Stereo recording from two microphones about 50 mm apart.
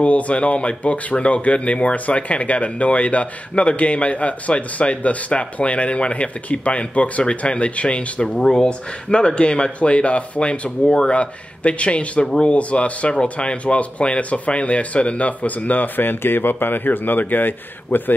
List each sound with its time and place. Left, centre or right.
0.0 s speech: left
8.4 s speech: centre; by 18.1 s left